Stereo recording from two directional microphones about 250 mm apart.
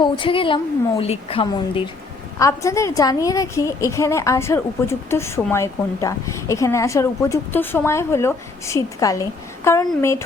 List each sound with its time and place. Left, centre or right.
0.0 s a woman's voice: centre